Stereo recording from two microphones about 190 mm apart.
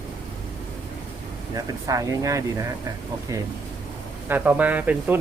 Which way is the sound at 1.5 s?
20° right (ahead or behind).